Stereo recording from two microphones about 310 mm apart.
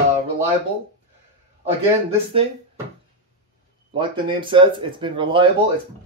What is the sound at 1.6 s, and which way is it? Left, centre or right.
Speech, centre.